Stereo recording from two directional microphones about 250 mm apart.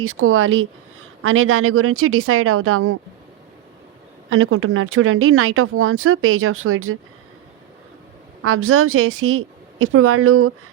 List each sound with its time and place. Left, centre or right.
0.0 s speech: right
4.3 s speech: right
8.4 s speech: right